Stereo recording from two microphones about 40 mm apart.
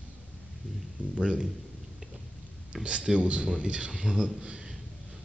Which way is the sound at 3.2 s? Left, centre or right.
Right.